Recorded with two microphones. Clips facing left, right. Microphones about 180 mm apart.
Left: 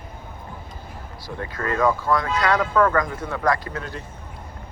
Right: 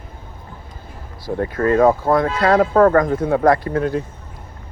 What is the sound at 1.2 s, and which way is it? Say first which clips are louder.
Speech: right 10 dB; 50° right (ahead or behind).